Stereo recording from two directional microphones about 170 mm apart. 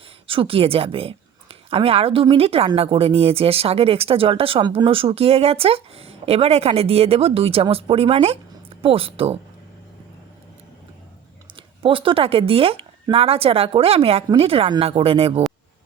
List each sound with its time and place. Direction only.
0.3 s a woman's voice: 30° right (ahead or behind)
11.5 s a woman's voice: 30° right (ahead or behind)